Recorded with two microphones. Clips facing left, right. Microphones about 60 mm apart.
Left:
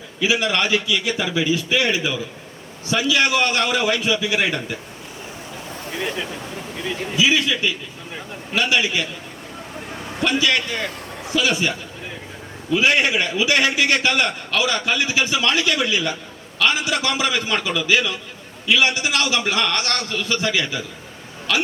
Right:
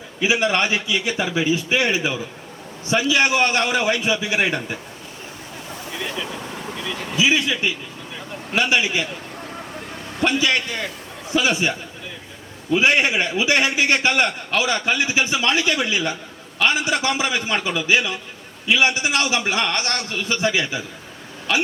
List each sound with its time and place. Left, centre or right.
0.2 s a man's voice: right
7.2 s a man's voice: right
10.4 s a man's voice: right
12.7 s a man's voice: right